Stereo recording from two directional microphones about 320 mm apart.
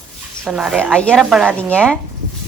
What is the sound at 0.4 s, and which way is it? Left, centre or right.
A woman's voice, centre.